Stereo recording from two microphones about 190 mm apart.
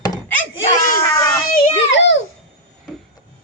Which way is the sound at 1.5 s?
65° left (ahead or behind).